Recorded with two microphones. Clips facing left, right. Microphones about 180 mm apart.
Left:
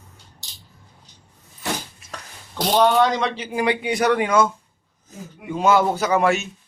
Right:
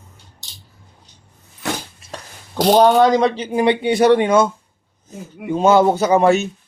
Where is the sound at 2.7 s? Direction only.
40° right (ahead or behind).